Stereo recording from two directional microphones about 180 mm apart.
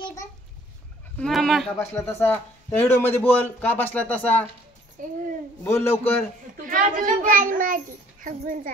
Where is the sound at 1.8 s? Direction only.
15° left (ahead or behind).